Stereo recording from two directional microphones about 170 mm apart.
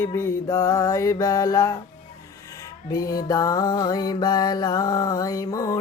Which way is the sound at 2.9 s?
20° left (ahead or behind).